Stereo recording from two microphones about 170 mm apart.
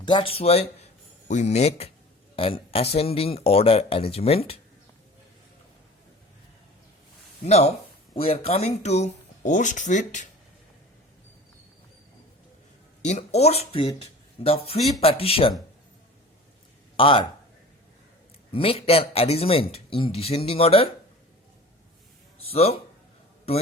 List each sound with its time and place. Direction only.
0.0 s speech: 30° left (ahead or behind)
7.4 s speech: 40° left (ahead or behind)
13.1 s speech: 40° left (ahead or behind)
17.0 s speech: 30° left (ahead or behind)
18.5 s speech: 35° left (ahead or behind)
22.4 s speech: 35° left (ahead or behind)